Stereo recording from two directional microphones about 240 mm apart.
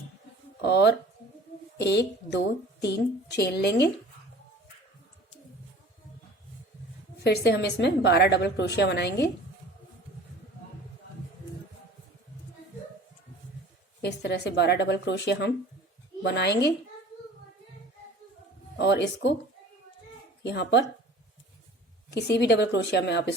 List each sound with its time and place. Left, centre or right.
0.6 s a woman's voice: left
7.3 s a woman's voice: left
14.0 s a woman's voice: left
18.8 s a woman's voice: left
20.4 s a woman's voice: left
22.1 s a woman's voice: left